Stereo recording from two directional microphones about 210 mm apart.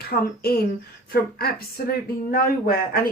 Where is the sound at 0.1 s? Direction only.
45° left (ahead or behind).